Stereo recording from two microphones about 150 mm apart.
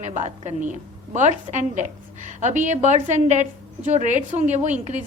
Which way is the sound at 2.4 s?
55° right (ahead or behind).